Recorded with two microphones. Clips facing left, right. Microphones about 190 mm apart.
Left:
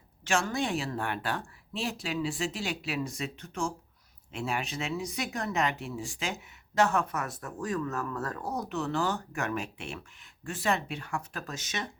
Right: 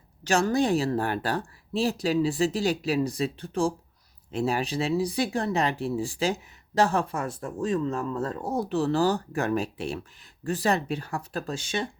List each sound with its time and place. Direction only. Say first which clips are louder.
0.3 s speech: right 7 dB; 40° right (ahead or behind)